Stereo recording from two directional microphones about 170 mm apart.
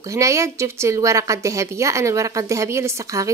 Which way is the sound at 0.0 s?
20° right (ahead or behind).